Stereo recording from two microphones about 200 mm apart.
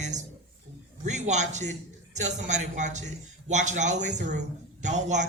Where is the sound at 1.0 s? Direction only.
35° right (ahead or behind).